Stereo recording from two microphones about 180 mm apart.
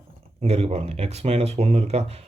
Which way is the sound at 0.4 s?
35° right (ahead or behind).